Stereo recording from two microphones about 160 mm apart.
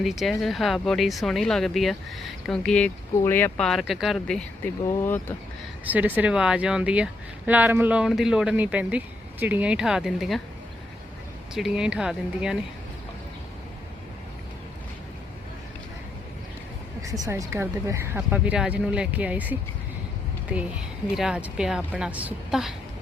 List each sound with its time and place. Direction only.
0.0 s speech: centre (ahead or behind)
4.9 s speech: 15° left (ahead or behind)
5.8 s a woman's voice: 10° right (ahead or behind)
11.5 s speech: 5° right (ahead or behind)
17.0 s a woman's voice: 20° right (ahead or behind)